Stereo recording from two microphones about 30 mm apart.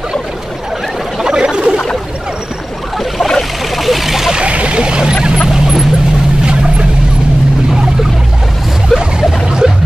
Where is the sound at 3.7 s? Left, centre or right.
Centre.